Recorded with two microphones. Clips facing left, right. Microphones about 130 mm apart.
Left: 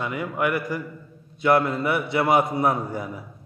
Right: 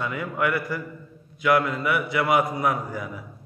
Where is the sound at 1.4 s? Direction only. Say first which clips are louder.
Left 2 dB; 30° left (ahead or behind).